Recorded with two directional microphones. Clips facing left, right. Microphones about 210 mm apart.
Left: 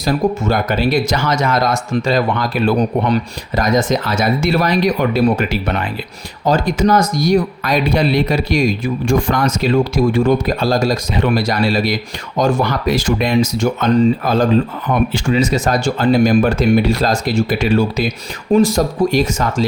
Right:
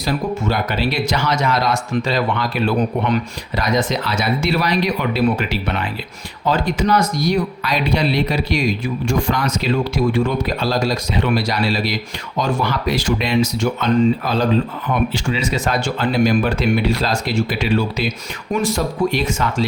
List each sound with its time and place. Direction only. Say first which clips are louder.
0.0 s speech: left 4 dB; 45° left (ahead or behind)